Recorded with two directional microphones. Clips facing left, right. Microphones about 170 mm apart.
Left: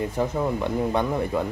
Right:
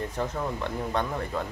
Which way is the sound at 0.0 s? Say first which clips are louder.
Left 6 dB; 10° left (ahead or behind).